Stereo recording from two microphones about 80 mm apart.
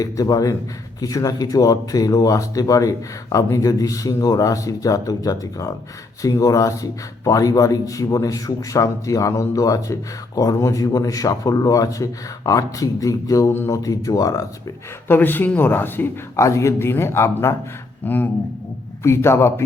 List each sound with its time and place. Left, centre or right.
0.0 s speech: left
13.5 s speech: left
13.7 s speech: left
15.0 s speech: left
16.3 s speech: left
18.0 s speech: left
19.0 s speech: left